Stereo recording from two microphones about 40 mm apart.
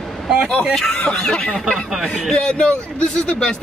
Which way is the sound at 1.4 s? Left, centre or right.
Left.